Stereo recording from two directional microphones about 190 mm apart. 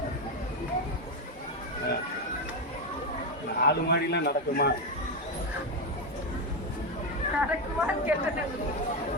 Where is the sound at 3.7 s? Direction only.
60° left (ahead or behind).